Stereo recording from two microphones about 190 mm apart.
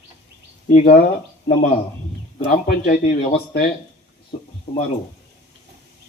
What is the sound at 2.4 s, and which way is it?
Speech, 55° left (ahead or behind).